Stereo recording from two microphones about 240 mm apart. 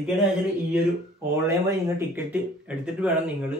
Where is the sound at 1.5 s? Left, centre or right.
Centre.